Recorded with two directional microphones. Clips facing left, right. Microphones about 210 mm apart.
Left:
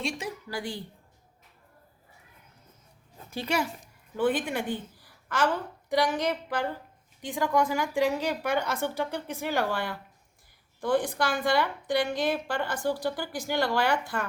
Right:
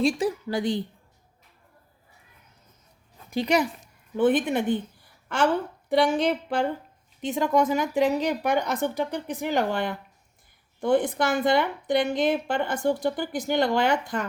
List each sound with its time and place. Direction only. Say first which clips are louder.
0.0 s a woman's voice: right 10 dB; 30° right (ahead or behind)
3.2 s a woman's voice: right 6 dB; 15° right (ahead or behind)